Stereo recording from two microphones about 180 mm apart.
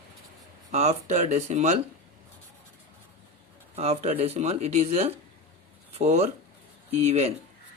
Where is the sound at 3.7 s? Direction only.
35° right (ahead or behind).